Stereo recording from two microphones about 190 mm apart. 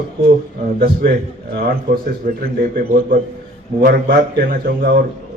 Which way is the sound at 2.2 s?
50° right (ahead or behind).